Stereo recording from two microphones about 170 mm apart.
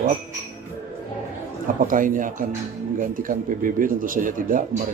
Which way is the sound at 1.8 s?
50° right (ahead or behind).